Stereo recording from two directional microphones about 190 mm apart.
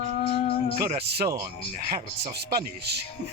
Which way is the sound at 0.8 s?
55° right (ahead or behind).